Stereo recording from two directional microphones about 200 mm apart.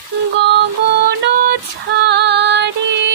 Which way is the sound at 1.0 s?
55° right (ahead or behind).